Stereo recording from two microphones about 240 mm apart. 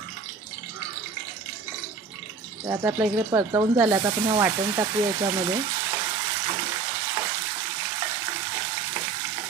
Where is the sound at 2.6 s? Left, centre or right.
Centre.